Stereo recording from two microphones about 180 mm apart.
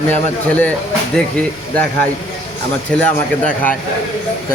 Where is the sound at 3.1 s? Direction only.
10° left (ahead or behind).